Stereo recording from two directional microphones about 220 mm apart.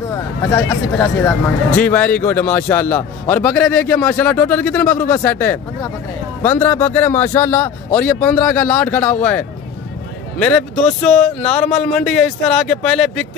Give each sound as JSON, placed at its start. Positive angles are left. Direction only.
{"t": 0.1, "sound": "a man's voice", "side_deg": 15}